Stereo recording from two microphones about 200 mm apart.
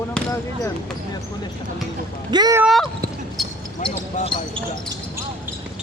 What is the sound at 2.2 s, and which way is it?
Speech, 20° right (ahead or behind).